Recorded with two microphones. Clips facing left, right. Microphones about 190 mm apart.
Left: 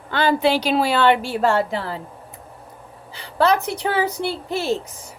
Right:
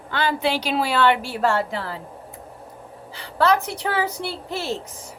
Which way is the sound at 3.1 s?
20° left (ahead or behind).